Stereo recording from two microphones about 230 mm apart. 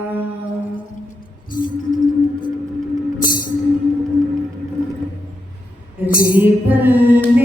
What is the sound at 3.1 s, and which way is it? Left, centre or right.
Music, left.